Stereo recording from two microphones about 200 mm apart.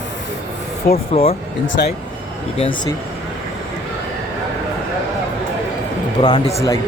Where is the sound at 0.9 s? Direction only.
30° left (ahead or behind).